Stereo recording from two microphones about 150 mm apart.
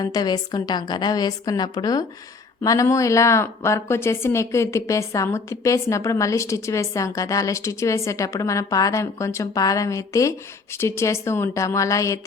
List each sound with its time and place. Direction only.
0.0 s a woman's voice: 25° left (ahead or behind)